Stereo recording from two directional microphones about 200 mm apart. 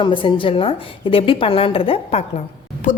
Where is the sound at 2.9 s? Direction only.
40° left (ahead or behind).